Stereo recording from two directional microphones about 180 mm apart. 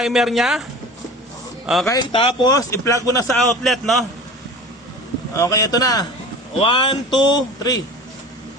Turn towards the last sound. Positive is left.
turn(degrees=20)  # may be behind; listen again after turning